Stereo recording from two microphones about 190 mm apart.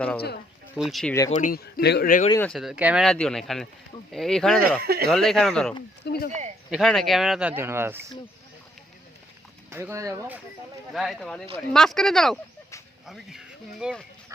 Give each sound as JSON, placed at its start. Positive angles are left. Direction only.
{"t": 0.8, "sound": "speech", "side_deg": 0}
{"t": 1.3, "sound": "a man's voice", "side_deg": 45}
{"t": 2.4, "sound": "speech", "side_deg": 0}
{"t": 4.8, "sound": "speech", "side_deg": -55}
{"t": 5.0, "sound": "speech", "side_deg": 0}
{"t": 6.0, "sound": "a sound", "side_deg": 65}
{"t": 6.7, "sound": "speech", "side_deg": 0}
{"t": 9.6, "sound": "speech", "side_deg": -15}
{"t": 10.9, "sound": "speech", "side_deg": 0}